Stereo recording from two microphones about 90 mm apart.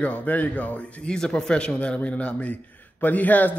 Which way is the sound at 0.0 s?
15° left (ahead or behind).